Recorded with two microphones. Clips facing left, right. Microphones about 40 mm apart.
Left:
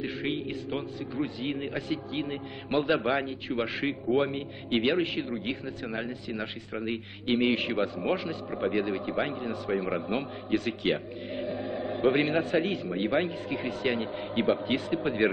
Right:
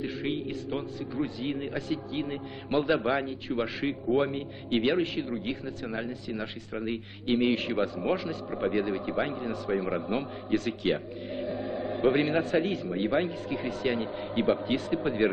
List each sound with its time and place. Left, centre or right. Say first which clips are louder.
0.0 s a man's voice: even; left
12.4 s a man's voice: even; centre
12.6 s a man's voice: even; left